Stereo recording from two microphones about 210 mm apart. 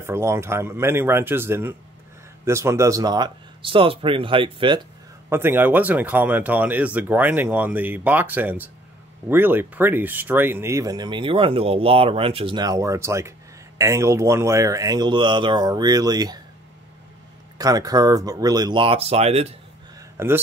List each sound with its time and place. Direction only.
0.0 s speech: 10° right (ahead or behind)
5.3 s speech: 10° right (ahead or behind)
17.6 s speech: 15° right (ahead or behind)
20.2 s speech: 10° right (ahead or behind)